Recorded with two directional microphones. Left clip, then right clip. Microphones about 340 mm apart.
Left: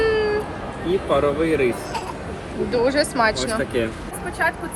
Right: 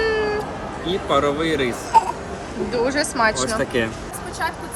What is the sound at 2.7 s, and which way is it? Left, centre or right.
Speech, centre.